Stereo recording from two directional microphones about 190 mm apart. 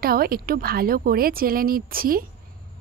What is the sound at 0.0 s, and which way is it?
A woman's voice, 50° right (ahead or behind).